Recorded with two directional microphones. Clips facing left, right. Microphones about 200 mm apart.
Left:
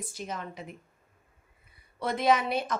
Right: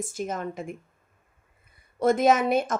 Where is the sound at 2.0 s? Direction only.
45° right (ahead or behind).